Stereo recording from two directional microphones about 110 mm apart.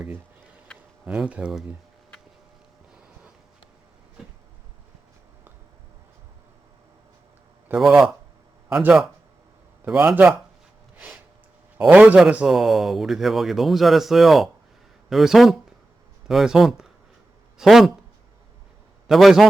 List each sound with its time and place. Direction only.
1.0 s a man's voice: 10° right (ahead or behind)
7.8 s a man's voice: 5° right (ahead or behind)
10.9 s a sound: 10° right (ahead or behind)
11.8 s a man's voice: 10° right (ahead or behind)
19.0 s a man's voice: centre (ahead or behind)